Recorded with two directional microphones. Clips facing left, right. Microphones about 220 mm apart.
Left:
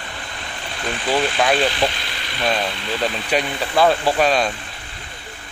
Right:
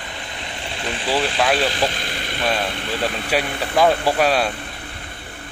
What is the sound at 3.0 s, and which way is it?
Speech, 5° right (ahead or behind).